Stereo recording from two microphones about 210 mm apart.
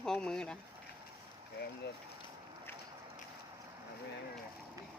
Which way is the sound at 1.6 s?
50° left (ahead or behind).